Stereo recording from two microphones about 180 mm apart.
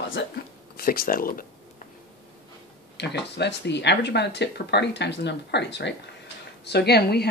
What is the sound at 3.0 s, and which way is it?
Speech, 70° left (ahead or behind).